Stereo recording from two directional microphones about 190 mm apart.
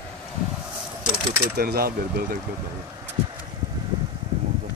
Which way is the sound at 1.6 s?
55° right (ahead or behind).